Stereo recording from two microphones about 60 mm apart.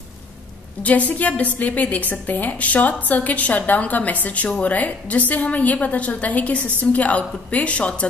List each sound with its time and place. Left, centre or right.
0.8 s a woman's voice: left